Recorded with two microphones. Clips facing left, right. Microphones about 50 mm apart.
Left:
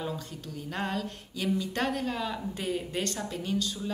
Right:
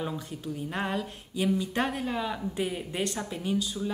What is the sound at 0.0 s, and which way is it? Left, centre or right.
Speech, centre.